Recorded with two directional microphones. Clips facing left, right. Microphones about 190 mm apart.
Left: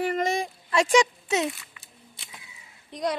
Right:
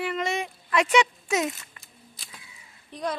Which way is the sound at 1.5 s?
45° right (ahead or behind).